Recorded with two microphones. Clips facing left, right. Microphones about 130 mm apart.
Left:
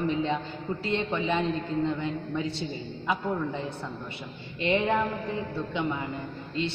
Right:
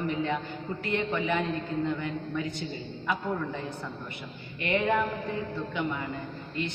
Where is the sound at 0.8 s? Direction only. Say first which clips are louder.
Even; 25° left (ahead or behind).